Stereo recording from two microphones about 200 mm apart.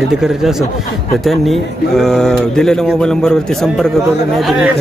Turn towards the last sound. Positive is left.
turn(degrees=0)  # may be behind; listen again after turning